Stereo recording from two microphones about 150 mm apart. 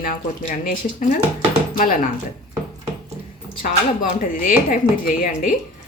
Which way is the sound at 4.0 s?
65° left (ahead or behind).